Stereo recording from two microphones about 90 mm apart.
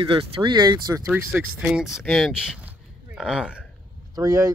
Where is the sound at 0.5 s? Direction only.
45° right (ahead or behind).